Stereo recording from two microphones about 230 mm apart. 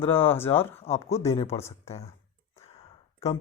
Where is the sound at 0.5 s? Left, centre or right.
Left.